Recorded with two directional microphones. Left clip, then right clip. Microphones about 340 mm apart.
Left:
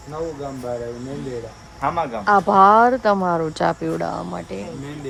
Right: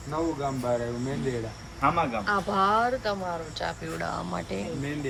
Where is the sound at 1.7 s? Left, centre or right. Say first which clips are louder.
Left 3 dB; centre.